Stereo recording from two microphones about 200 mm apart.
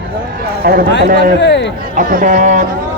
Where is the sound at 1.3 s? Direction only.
60° left (ahead or behind).